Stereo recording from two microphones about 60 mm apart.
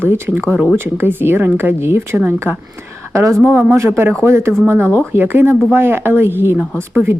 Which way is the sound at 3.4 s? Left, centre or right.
Right.